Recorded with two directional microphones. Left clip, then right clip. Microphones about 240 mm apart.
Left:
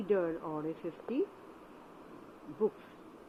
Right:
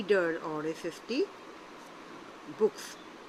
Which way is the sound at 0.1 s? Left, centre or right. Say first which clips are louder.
Right 4 dB; centre.